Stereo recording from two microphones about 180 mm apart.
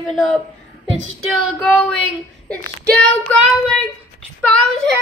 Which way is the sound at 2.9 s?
5° left (ahead or behind).